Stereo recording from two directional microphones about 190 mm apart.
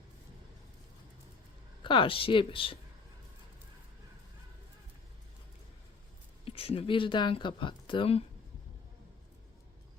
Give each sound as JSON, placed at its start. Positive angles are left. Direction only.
{"t": 1.8, "sound": "speech", "side_deg": 25}
{"t": 6.4, "sound": "speech", "side_deg": 30}